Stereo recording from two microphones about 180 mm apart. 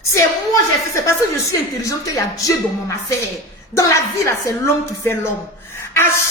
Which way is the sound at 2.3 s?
20° left (ahead or behind).